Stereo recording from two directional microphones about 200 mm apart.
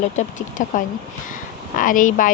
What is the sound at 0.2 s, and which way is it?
A woman's voice, 40° left (ahead or behind).